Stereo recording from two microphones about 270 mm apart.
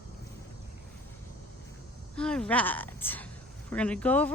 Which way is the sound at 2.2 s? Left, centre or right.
Centre.